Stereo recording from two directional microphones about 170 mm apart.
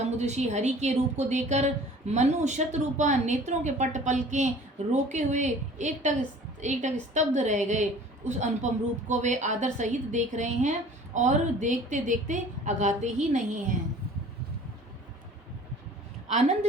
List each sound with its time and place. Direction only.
0.2 s a woman's voice: 40° right (ahead or behind)